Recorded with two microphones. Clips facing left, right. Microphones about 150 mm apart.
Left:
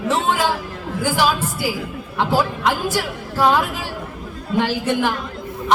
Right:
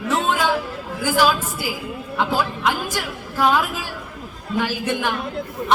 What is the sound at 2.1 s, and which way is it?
Speech, 15° left (ahead or behind).